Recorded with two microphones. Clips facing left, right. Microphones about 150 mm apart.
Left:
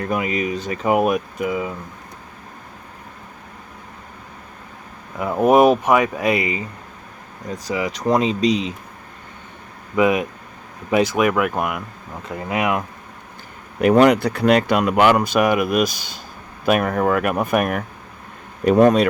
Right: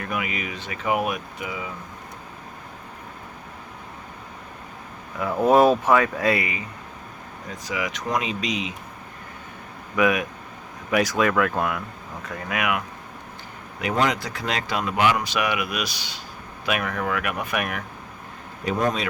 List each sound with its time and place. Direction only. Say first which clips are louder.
0.0 s speech: left 7 dB; 30° left (ahead or behind); by 1.7 s 50° left (ahead or behind)
5.1 s speech: left 3 dB; 20° left (ahead or behind)
7.6 s speech: left 6 dB; 35° left (ahead or behind)
9.9 s speech: left 4 dB; 25° left (ahead or behind)
13.8 s speech: left 10 dB; 60° left (ahead or behind)
18.6 s speech: left 11 dB; 60° left (ahead or behind)